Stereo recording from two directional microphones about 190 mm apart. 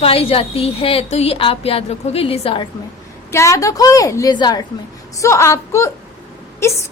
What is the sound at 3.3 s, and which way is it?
A woman's voice, 15° left (ahead or behind).